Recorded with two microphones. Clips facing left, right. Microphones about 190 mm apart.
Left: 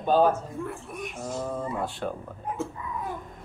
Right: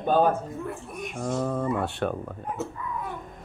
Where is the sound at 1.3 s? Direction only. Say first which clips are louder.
Right 5 dB; 65° right (ahead or behind).